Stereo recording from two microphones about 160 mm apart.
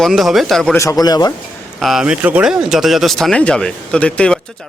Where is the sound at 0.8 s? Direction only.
20° left (ahead or behind).